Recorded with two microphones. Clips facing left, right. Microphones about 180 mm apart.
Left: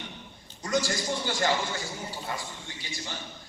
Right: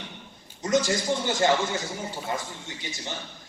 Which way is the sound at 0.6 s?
20° right (ahead or behind).